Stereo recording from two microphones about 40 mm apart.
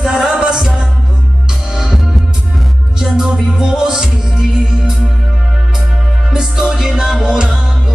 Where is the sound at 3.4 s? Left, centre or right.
Centre.